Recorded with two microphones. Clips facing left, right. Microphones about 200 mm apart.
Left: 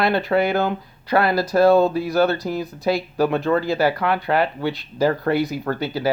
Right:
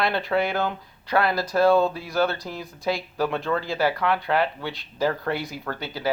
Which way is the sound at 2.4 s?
45° left (ahead or behind).